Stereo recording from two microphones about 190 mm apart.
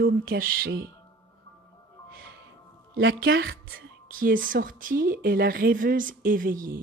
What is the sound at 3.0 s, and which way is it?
Speech, 85° right.